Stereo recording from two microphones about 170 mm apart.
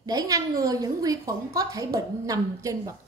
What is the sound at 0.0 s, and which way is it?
A woman's voice, 20° right (ahead or behind).